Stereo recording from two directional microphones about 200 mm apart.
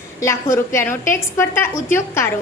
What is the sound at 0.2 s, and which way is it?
A woman's voice, 15° left (ahead or behind).